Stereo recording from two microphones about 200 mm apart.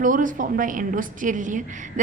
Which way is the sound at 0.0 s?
40° right (ahead or behind).